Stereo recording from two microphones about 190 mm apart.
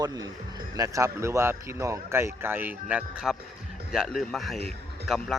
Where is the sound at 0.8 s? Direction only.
15° right (ahead or behind).